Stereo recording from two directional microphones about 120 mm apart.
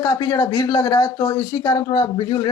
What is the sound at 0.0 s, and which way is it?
Speech, 30° left (ahead or behind).